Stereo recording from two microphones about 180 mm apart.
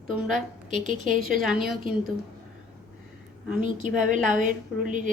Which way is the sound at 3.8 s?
45° right (ahead or behind).